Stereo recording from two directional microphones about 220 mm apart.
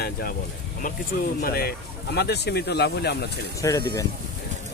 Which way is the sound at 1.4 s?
45° left (ahead or behind).